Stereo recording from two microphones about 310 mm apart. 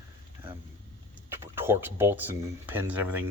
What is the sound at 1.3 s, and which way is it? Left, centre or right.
Speech, centre.